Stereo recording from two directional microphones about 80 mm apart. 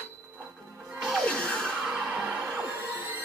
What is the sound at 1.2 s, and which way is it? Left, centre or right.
Music, centre.